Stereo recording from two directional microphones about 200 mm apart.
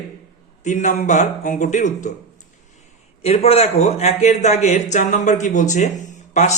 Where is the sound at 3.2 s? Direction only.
30° left (ahead or behind).